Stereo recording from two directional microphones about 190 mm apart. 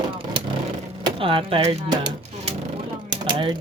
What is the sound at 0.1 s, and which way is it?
Vehicle, 25° right (ahead or behind).